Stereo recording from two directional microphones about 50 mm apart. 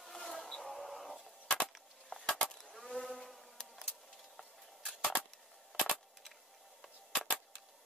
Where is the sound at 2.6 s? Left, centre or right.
Centre.